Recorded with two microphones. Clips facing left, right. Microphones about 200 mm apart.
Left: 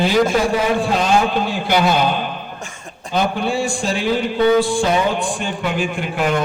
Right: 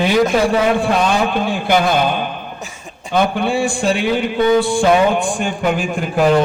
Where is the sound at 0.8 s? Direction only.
55° right (ahead or behind).